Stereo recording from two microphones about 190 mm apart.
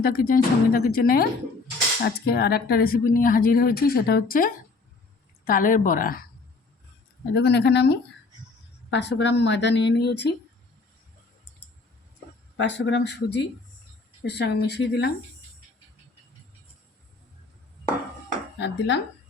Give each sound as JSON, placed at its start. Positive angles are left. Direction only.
{"t": 0.0, "sound": "speech", "side_deg": 50}
{"t": 7.3, "sound": "speech", "side_deg": 65}
{"t": 12.5, "sound": "speech", "side_deg": 70}
{"t": 18.6, "sound": "speech", "side_deg": 70}